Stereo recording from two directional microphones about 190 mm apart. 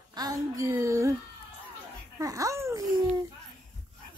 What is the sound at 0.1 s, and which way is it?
Child singing, 20° right (ahead or behind).